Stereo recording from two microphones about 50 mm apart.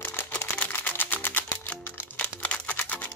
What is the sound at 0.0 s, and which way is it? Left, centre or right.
Music, left.